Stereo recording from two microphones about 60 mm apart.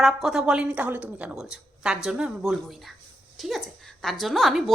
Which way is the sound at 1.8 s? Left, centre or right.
Centre.